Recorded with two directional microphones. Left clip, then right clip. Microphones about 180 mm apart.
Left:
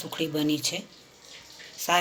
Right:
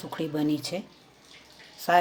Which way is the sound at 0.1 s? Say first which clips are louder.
Left 1 dB; 45° right (ahead or behind).